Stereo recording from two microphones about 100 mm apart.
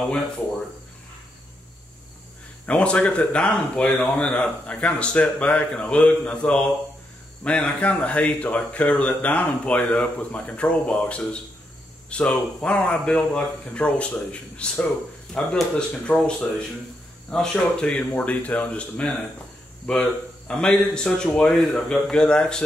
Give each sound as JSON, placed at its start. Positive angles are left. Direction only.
{"t": 2.6, "sound": "speech", "side_deg": 10}